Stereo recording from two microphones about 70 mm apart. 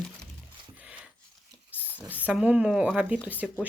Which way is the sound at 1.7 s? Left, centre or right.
Right.